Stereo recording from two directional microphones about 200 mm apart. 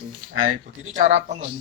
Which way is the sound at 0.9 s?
30° right (ahead or behind).